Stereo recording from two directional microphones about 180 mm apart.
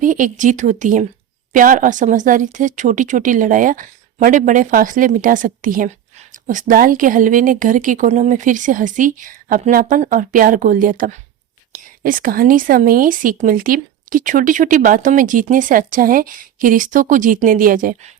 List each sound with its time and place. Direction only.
0.0 s speech: 45° right (ahead or behind)